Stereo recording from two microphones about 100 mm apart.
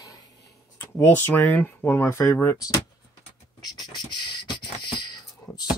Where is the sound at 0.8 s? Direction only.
20° left (ahead or behind).